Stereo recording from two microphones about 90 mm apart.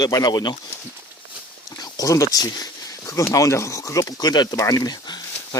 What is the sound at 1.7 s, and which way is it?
Speech, 40° left (ahead or behind).